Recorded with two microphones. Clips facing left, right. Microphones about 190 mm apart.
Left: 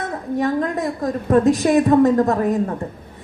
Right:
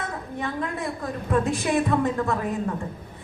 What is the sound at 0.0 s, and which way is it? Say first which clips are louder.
A woman's voice: left 9 dB; 40° left (ahead or behind).